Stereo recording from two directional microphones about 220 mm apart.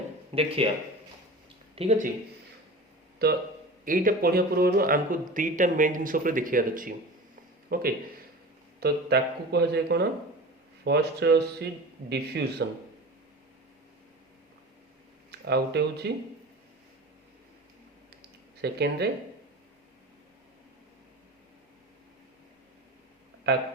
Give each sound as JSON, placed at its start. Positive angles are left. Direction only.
{"t": 0.3, "sound": "speech", "side_deg": -25}
{"t": 1.7, "sound": "speech", "side_deg": -30}
{"t": 3.2, "sound": "speech", "side_deg": -45}
{"t": 15.3, "sound": "speech", "side_deg": -50}
{"t": 18.6, "sound": "speech", "side_deg": -50}
{"t": 23.5, "sound": "a man's voice", "side_deg": -50}